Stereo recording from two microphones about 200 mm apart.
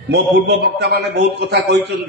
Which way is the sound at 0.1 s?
60° right (ahead or behind).